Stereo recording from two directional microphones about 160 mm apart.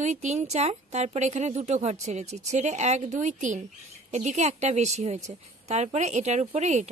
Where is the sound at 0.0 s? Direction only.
45° right (ahead or behind).